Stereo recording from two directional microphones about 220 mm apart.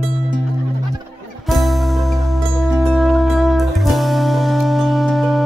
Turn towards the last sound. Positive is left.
turn(degrees=0)  # may be behind; listen again after turning